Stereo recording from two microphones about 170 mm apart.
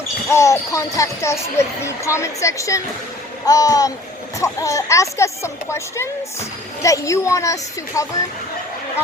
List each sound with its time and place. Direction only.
0.3 s speech: 15° left (ahead or behind)